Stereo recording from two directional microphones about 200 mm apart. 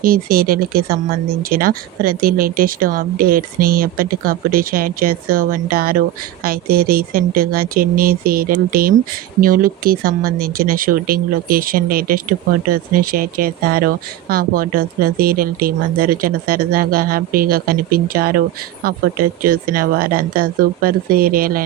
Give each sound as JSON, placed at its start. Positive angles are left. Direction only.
{"t": 0.0, "sound": "speech", "side_deg": -45}
{"t": 19.4, "sound": "speech", "side_deg": -45}